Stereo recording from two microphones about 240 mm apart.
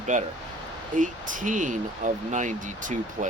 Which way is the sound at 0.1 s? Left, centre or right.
Right.